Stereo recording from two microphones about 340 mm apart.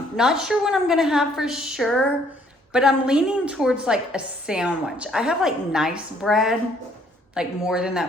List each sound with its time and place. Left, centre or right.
0.2 s a woman's voice: centre